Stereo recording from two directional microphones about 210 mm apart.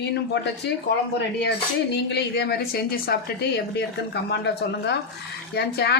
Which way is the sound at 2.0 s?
50° left (ahead or behind).